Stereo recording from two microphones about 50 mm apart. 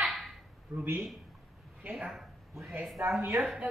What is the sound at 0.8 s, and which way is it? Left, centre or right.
Speech, right.